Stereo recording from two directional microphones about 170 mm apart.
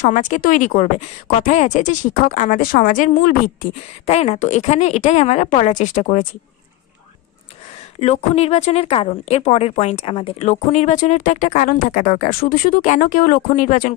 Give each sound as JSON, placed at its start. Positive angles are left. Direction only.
{"t": 0.0, "sound": "a woman's voice", "side_deg": 45}
{"t": 4.0, "sound": "a woman's voice", "side_deg": 40}
{"t": 8.0, "sound": "a woman's voice", "side_deg": 40}